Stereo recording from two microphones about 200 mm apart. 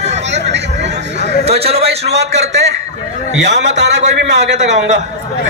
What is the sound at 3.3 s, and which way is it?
A man's voice, 60° right (ahead or behind).